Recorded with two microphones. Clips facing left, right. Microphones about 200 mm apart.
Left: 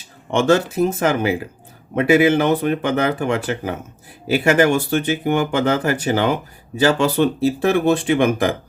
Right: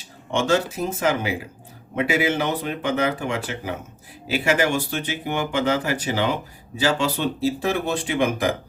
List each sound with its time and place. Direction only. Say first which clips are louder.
0.3 s speech: left 5 dB; 60° left (ahead or behind)